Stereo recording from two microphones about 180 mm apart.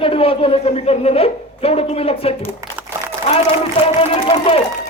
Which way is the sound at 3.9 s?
30° left (ahead or behind).